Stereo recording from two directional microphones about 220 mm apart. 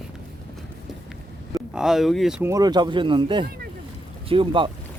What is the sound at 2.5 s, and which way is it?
Speech, 20° right (ahead or behind).